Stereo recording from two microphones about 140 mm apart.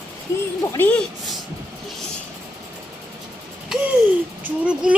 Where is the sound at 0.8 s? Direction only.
10° left (ahead or behind).